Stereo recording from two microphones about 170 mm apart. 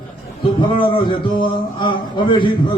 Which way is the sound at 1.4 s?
30° left (ahead or behind).